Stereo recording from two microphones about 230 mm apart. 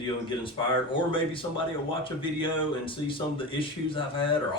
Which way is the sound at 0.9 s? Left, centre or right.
Left.